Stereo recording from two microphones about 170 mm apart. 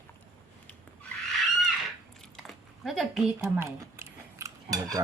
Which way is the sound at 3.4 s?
15° right (ahead or behind).